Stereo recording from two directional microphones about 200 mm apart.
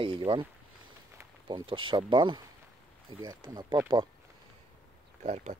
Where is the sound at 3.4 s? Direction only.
20° right (ahead or behind).